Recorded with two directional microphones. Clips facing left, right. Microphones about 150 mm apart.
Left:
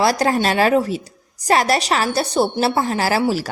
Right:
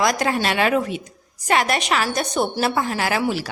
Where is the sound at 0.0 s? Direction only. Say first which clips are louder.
Left 3 dB; 35° left (ahead or behind).